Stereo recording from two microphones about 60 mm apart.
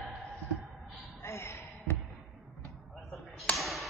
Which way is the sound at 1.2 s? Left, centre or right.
Left.